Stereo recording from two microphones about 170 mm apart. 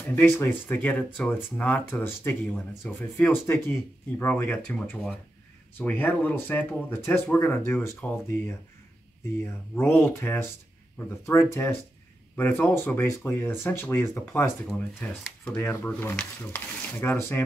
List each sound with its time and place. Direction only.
0.1 s speech: 10° left (ahead or behind)